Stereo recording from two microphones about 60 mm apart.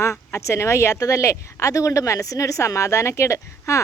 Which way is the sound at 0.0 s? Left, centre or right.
Left.